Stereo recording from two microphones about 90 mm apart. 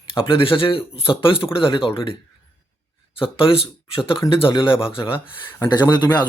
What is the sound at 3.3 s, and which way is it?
Speech, 90° left.